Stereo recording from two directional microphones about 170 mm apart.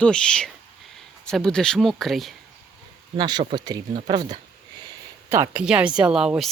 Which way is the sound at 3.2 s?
25° right (ahead or behind).